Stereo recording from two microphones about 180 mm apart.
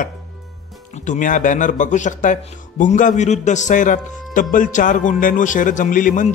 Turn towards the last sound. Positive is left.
turn(degrees=45)  # may be behind; listen again after turning